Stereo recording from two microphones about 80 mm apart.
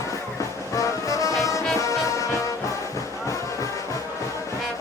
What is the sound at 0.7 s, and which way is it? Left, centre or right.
Music, left.